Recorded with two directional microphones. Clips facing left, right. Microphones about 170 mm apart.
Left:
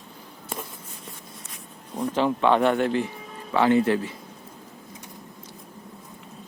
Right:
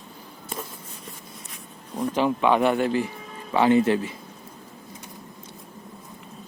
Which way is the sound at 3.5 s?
15° right (ahead or behind).